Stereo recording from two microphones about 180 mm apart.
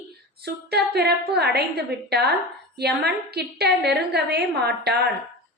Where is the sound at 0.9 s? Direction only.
65° right (ahead or behind).